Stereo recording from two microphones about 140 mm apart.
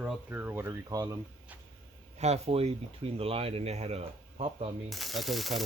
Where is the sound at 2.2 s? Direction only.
50° right (ahead or behind).